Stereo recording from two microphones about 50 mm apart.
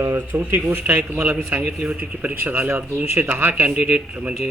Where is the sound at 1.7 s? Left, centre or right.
Right.